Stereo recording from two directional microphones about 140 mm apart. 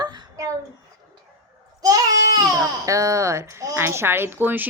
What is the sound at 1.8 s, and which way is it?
Speech, 25° right (ahead or behind).